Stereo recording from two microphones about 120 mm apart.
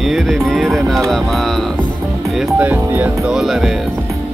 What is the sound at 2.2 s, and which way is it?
Speech, 5° right (ahead or behind).